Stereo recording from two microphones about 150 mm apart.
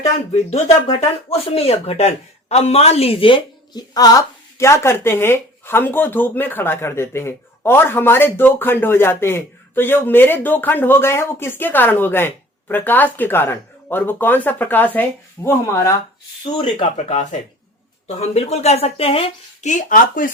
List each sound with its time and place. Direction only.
1.3 s speech: 45° left (ahead or behind); by 16.0 s 20° left (ahead or behind)
16.6 s a woman's voice: 40° left (ahead or behind); by 20.3 s 65° left (ahead or behind)